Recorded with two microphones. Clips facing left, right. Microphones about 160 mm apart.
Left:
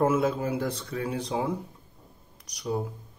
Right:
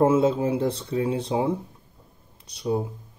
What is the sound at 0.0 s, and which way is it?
Speech, 25° right (ahead or behind).